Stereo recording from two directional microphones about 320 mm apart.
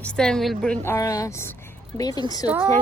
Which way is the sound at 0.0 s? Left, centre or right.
Centre.